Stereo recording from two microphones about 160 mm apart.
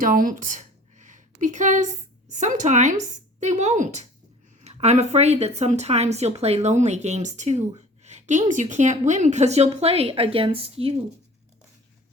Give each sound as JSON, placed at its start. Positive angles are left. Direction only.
{"t": 0.0, "sound": "speech", "side_deg": -60}